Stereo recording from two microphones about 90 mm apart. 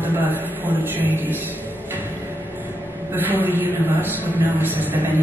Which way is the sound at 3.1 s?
20° right (ahead or behind).